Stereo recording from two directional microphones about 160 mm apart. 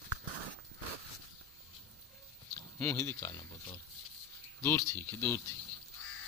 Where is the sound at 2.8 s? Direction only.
15° left (ahead or behind).